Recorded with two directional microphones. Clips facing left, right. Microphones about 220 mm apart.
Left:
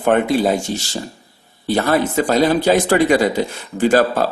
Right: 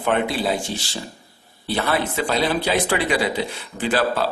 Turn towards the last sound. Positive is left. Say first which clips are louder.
# left 6 dB
turn(degrees=45)  # may be behind; listen again after turning